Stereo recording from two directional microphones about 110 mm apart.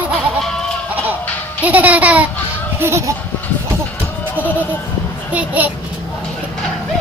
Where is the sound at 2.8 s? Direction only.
25° right (ahead or behind).